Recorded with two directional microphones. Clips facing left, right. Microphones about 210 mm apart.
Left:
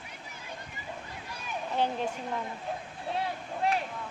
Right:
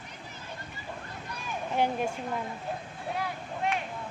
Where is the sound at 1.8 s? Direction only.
10° right (ahead or behind).